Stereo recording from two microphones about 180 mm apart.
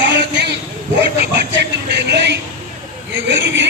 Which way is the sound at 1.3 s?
75° right (ahead or behind).